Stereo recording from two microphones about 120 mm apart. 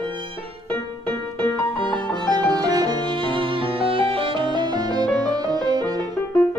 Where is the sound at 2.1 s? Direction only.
35° right (ahead or behind).